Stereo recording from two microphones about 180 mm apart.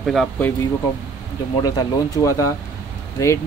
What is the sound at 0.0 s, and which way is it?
Speech, centre (ahead or behind).